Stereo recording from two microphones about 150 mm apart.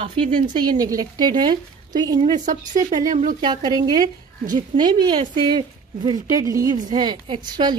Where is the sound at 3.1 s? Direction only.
65° right (ahead or behind).